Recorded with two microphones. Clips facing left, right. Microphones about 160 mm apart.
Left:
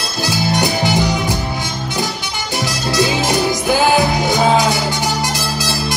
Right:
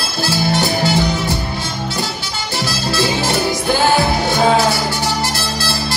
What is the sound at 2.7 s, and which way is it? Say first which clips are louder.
Music: left 1 dB; 20° left (ahead or behind).